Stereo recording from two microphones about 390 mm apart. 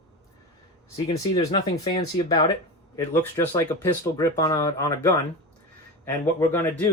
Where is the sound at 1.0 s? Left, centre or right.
Centre.